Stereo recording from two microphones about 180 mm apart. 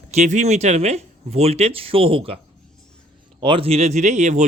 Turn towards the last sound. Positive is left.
turn(degrees=-40)  # may be behind; listen again after turning